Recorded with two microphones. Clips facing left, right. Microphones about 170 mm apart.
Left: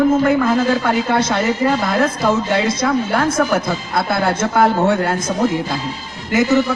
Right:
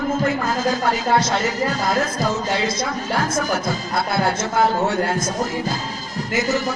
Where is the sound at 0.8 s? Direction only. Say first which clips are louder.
Left 2 dB; 60° left (ahead or behind).